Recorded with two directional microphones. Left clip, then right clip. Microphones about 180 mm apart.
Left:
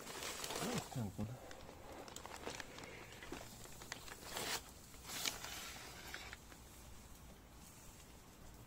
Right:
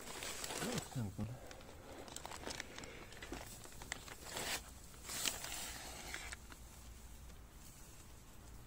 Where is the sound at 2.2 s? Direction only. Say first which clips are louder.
Right 4 dB; 40° right (ahead or behind).